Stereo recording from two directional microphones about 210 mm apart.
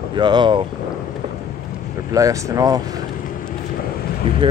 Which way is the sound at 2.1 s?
15° right (ahead or behind).